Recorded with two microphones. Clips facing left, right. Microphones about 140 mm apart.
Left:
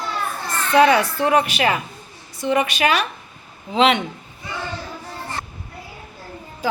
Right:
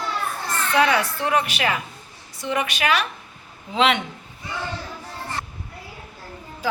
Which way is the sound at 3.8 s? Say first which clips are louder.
Left 3 dB; 35° left (ahead or behind).